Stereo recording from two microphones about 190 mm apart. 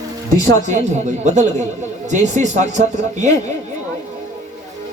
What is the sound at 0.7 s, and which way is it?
Speech, 40° right (ahead or behind).